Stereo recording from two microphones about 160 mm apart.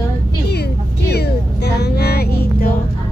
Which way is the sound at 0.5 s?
90° left.